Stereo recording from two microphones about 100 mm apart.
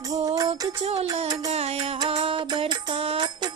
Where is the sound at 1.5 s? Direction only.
90° right.